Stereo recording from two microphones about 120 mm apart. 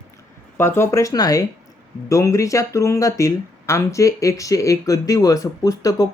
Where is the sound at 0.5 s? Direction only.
20° left (ahead or behind).